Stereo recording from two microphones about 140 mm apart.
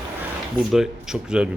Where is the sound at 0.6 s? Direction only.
5° right (ahead or behind).